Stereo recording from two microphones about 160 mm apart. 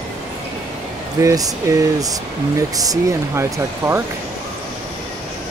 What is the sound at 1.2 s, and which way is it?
Speech, 20° right (ahead or behind).